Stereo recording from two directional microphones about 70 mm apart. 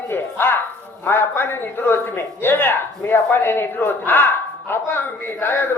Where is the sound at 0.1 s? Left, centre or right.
Left.